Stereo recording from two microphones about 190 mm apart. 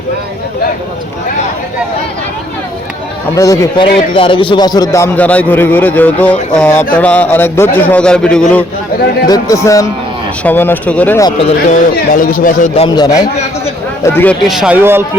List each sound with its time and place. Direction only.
3.3 s a man's voice: 15° left (ahead or behind)
9.3 s a man's voice: 15° left (ahead or behind)
11.2 s speech: 25° left (ahead or behind)
12.1 s speech: 45° left (ahead or behind)
12.7 s speech: 25° left (ahead or behind)
14.0 s a man's voice: 10° left (ahead or behind)
14.4 s speech: centre (ahead or behind)